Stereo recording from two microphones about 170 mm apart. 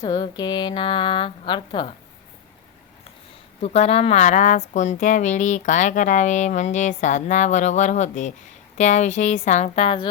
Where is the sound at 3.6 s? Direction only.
40° left (ahead or behind).